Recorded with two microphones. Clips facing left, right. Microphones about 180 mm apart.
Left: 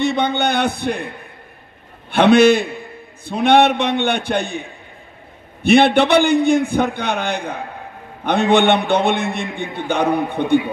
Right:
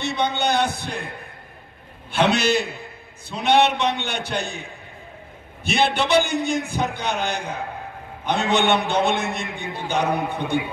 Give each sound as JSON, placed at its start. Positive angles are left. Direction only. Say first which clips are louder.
{"t": 0.0, "sound": "a man's voice", "louder": "left 5 dB", "side_deg": 55}
{"t": 2.0, "sound": "a man's voice", "louder": "left 9 dB", "side_deg": 60}